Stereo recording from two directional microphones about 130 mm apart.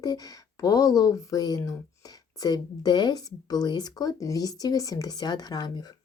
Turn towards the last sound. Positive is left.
turn(degrees=30)  # may be behind; listen again after turning